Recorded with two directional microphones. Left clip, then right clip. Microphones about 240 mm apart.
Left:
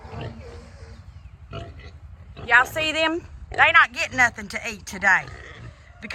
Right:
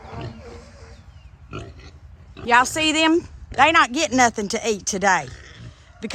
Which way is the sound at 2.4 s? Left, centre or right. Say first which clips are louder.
Right 1 dB; right.